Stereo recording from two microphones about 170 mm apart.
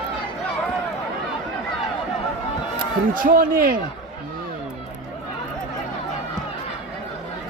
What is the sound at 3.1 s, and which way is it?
Speech, 55° right (ahead or behind).